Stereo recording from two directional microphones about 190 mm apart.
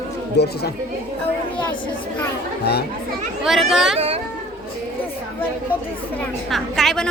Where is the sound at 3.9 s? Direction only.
30° right (ahead or behind).